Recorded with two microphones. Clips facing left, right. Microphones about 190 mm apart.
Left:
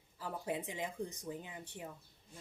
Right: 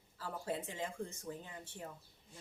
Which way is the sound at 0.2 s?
15° left (ahead or behind).